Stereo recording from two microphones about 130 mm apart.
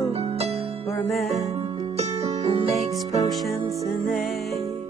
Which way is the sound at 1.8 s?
50° right (ahead or behind).